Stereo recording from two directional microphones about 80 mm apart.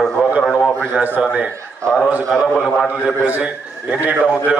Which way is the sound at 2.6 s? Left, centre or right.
Centre.